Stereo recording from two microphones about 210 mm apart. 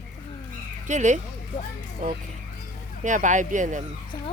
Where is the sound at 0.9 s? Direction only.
35° right (ahead or behind).